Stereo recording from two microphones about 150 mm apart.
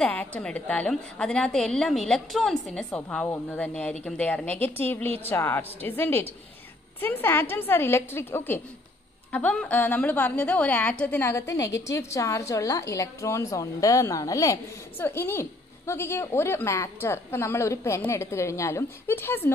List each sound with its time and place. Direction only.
0.0 s a woman's voice: 10° left (ahead or behind)